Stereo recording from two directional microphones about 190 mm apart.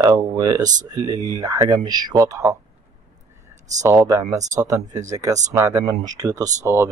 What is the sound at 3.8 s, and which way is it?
Speech, 15° right (ahead or behind).